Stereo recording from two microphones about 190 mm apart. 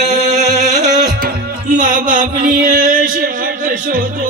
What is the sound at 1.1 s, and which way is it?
Music, 45° right (ahead or behind).